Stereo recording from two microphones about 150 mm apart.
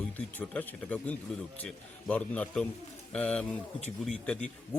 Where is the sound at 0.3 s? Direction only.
10° left (ahead or behind).